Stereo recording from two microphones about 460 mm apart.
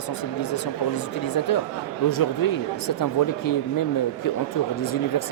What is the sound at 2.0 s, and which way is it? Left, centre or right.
Speech, left.